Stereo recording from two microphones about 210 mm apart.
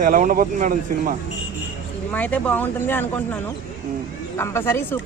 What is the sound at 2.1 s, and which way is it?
Speech, 5° left (ahead or behind).